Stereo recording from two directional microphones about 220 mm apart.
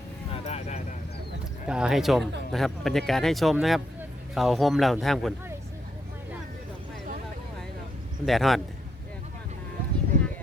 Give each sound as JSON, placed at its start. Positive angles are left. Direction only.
{"t": 0.3, "sound": "a sound", "side_deg": 30}
{"t": 1.6, "sound": "speech", "side_deg": -5}
{"t": 8.2, "sound": "speech", "side_deg": 0}